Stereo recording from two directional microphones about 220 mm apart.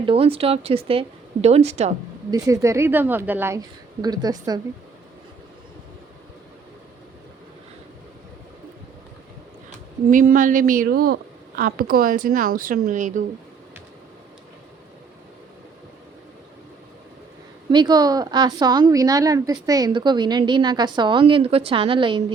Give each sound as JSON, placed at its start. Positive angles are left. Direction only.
{"t": 0.0, "sound": "a woman's voice", "side_deg": -25}
{"t": 2.3, "sound": "a woman's voice", "side_deg": -15}
{"t": 9.6, "sound": "speech", "side_deg": -35}
{"t": 17.7, "sound": "a woman's voice", "side_deg": -20}